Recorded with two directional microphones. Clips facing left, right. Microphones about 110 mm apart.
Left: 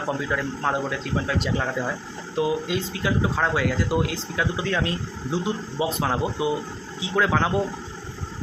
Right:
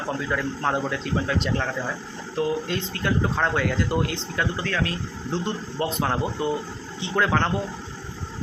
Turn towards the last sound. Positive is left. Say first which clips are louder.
# left 1 dB
turn(degrees=5)  # may be behind; listen again after turning